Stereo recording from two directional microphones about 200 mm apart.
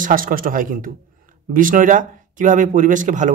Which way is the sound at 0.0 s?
45° right (ahead or behind).